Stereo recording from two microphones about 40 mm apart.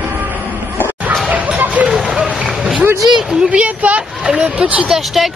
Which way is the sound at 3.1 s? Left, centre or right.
Centre.